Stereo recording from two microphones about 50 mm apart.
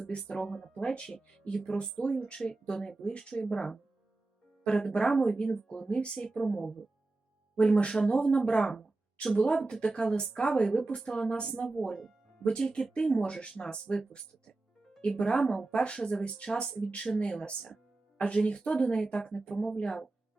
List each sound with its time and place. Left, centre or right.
0.2 s speech: centre
0.4 s speech: centre
0.7 s speech: centre
4.8 s speech: centre
11.9 s music: centre
12.5 s speech: centre